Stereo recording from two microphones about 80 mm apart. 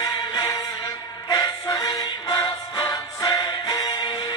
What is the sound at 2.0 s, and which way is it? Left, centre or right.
Music, left.